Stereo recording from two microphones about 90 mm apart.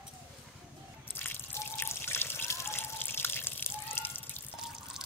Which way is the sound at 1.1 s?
25° left (ahead or behind).